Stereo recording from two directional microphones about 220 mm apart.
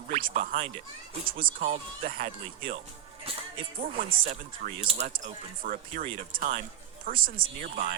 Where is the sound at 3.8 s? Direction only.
40° right (ahead or behind).